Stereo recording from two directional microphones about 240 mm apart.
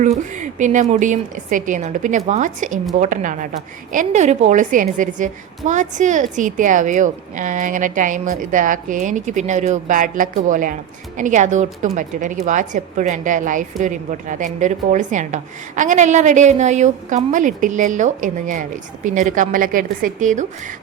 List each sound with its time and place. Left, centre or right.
0.0 s a woman's voice: right